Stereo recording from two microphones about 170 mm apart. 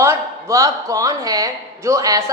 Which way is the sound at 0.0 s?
15° right (ahead or behind).